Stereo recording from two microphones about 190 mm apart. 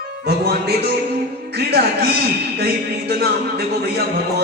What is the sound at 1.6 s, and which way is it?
Speech, 60° right (ahead or behind).